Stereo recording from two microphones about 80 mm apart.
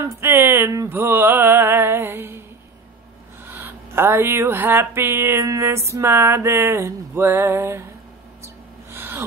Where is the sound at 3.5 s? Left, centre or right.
Right.